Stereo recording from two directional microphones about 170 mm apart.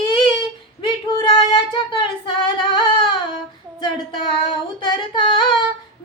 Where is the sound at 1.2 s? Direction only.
25° left (ahead or behind).